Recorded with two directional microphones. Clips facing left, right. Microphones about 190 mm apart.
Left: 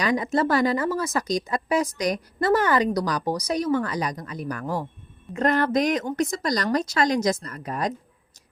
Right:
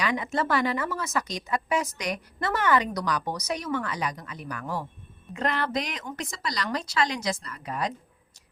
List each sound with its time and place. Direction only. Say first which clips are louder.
0.0 s speech: left 5 dB; 40° left (ahead or behind)